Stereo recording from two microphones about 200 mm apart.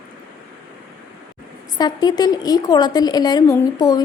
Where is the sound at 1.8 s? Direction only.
20° left (ahead or behind).